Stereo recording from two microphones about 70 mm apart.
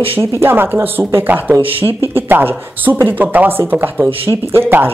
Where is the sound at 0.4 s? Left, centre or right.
Right.